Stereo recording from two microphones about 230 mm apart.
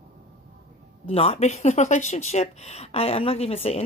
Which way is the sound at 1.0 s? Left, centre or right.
Left.